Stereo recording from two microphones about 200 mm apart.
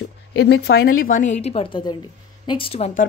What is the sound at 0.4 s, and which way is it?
Speech, 55° left (ahead or behind).